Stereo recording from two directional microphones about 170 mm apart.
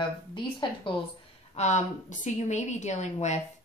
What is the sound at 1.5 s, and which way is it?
A woman's voice, 45° left (ahead or behind).